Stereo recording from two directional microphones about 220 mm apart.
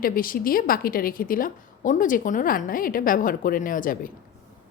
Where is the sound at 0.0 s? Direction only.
40° left (ahead or behind).